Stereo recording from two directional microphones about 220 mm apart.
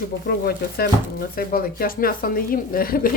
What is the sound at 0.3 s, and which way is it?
A woman's voice, 45° left (ahead or behind).